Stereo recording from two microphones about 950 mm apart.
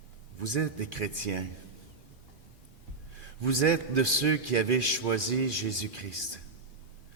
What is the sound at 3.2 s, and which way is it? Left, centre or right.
A man's voice, right.